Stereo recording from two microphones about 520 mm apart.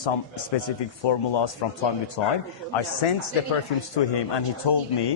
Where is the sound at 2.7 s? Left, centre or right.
Left.